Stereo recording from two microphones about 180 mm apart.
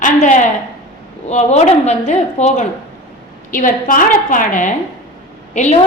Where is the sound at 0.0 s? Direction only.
45° left (ahead or behind).